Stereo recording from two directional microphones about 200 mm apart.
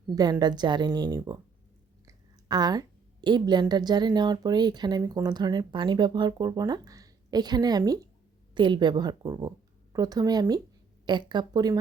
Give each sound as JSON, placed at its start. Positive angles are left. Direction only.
{"t": 0.2, "sound": "a woman's voice", "side_deg": -20}